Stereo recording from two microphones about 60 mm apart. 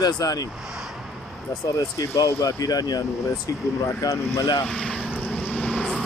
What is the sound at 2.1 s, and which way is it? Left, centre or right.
Speech, left.